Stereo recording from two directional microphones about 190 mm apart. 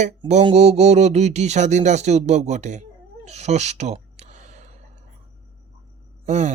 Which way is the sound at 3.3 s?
35° right (ahead or behind).